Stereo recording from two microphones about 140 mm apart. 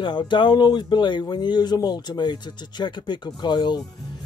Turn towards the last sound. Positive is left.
turn(degrees=30)  # may be behind; listen again after turning